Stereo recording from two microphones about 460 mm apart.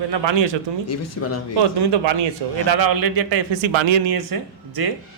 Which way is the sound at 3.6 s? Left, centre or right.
Right.